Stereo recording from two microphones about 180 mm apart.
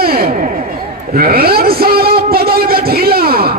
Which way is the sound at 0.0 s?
55° right (ahead or behind).